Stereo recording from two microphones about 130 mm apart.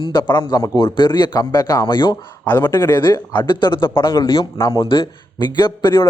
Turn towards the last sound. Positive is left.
turn(degrees=35)  # may be behind; listen again after turning